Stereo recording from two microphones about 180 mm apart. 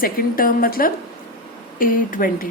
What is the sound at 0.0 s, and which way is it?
A woman's voice, 55° left (ahead or behind).